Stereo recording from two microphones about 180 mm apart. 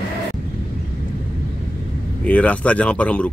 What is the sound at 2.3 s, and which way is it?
Speech, 5° left (ahead or behind).